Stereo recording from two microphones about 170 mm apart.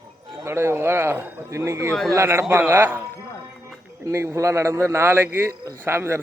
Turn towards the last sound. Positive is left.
turn(degrees=-15)  # may be behind; listen again after turning